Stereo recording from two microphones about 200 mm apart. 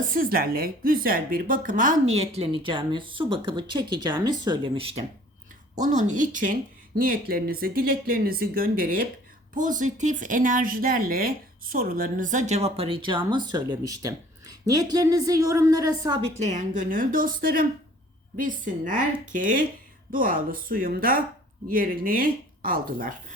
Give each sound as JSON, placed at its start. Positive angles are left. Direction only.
{"t": 0.1, "sound": "speech", "side_deg": -45}
{"t": 5.8, "sound": "speech", "side_deg": -40}
{"t": 16.4, "sound": "a woman's voice", "side_deg": -35}